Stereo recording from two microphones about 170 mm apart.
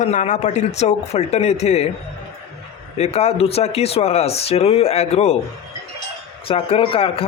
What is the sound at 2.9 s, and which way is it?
A man's voice, 40° left (ahead or behind).